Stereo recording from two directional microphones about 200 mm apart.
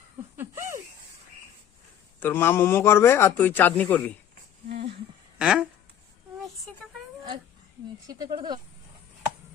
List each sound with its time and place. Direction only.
0.3 s laughter: 15° right (ahead or behind)
2.2 s a man's voice: 10° left (ahead or behind)
4.7 s a sound: 30° right (ahead or behind)
5.4 s speech: 5° right (ahead or behind)
6.7 s speech: 5° left (ahead or behind)
8.4 s speech: 20° right (ahead or behind)